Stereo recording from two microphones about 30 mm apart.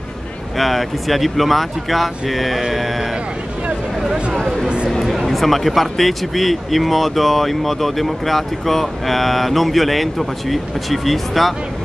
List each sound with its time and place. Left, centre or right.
0.6 s speech: centre
5.0 s a sound: centre
5.8 s speech: centre